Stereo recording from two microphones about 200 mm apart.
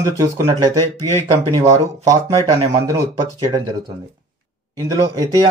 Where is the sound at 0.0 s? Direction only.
15° right (ahead or behind).